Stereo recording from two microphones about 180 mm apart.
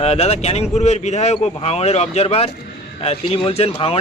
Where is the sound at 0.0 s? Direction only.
35° left (ahead or behind).